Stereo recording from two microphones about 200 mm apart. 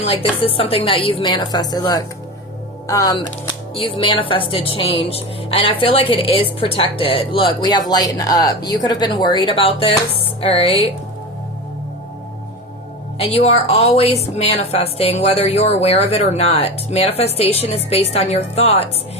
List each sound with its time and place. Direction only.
0.0 s a woman's voice: 30° left (ahead or behind)
13.1 s a woman's voice: 30° left (ahead or behind)